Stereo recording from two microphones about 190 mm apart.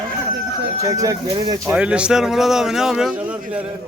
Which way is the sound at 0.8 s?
15° right (ahead or behind).